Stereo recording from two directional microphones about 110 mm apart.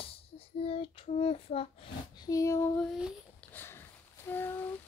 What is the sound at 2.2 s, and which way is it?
Female singing, 30° left (ahead or behind).